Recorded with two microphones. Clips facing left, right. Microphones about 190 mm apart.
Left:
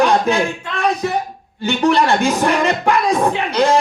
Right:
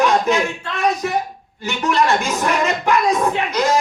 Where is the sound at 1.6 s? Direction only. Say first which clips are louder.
Left 4 dB; 30° left (ahead or behind).